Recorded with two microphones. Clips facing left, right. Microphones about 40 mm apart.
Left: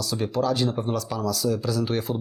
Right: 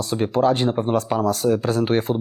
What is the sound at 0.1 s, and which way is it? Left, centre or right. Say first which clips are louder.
Speech: right 6 dB; right.